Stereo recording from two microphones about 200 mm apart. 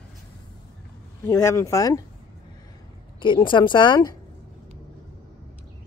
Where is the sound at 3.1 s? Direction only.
25° left (ahead or behind).